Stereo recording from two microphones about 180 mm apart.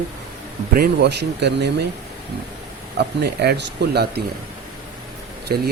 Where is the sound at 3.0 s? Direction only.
65° right (ahead or behind).